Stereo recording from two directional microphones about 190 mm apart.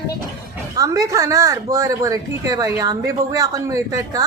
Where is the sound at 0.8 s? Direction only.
15° right (ahead or behind).